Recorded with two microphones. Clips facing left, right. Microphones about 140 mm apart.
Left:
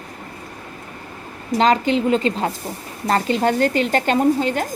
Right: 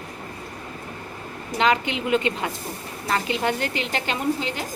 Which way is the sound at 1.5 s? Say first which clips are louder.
Left 6 dB; 35° left (ahead or behind).